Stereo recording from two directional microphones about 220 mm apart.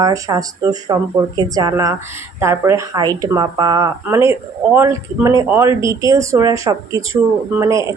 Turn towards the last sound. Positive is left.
turn(degrees=-15)  # may be behind; listen again after turning